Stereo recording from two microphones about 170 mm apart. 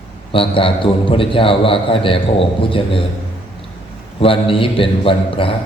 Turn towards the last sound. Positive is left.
turn(degrees=30)  # may be behind; listen again after turning